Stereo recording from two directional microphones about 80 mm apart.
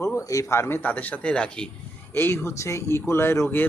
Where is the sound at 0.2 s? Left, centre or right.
Left; by 1.7 s centre.